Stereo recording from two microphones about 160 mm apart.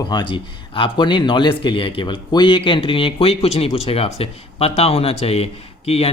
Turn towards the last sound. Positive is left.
turn(degrees=40)  # may be behind; listen again after turning